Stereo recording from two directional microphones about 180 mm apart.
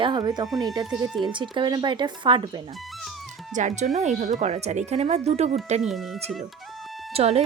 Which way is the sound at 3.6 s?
45° right (ahead or behind).